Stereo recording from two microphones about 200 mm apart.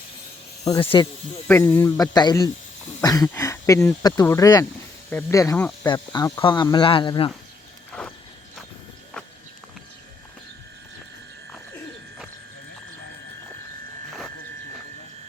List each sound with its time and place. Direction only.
0.7 s speech: 25° left (ahead or behind)
1.5 s speech: 10° left (ahead or behind)
8.0 s horse: 5° left (ahead or behind)